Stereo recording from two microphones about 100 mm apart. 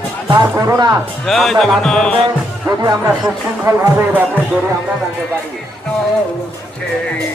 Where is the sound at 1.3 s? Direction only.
5° left (ahead or behind).